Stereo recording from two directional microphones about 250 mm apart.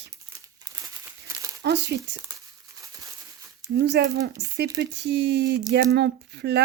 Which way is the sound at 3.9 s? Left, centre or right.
Right.